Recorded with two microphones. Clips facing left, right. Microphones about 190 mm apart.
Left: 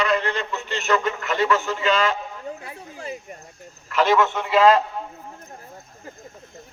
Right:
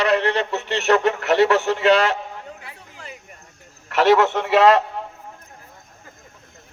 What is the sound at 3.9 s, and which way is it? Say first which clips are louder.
Speech: right 3 dB; 75° right (ahead or behind).